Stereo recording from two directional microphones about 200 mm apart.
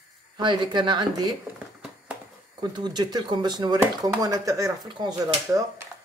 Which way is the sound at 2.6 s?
20° right (ahead or behind).